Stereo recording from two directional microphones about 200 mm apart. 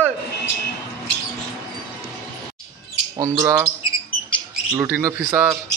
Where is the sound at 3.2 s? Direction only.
15° right (ahead or behind).